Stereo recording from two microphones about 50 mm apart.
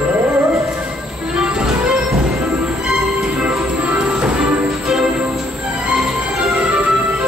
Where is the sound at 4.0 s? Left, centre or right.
Centre.